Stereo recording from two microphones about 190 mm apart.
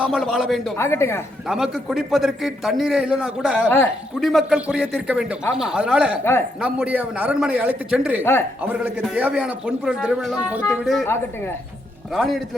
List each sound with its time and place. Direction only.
0.0 s a man's voice: centre (ahead or behind)
0.8 s speech: 15° left (ahead or behind)
1.5 s a man's voice: 5° right (ahead or behind)
8.2 s speech: 10° left (ahead or behind)
8.6 s a man's voice: 10° right (ahead or behind)
11.0 s speech: 15° left (ahead or behind)
12.1 s a man's voice: centre (ahead or behind)